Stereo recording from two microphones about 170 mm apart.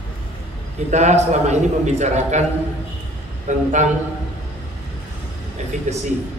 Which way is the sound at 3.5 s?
45° right (ahead or behind).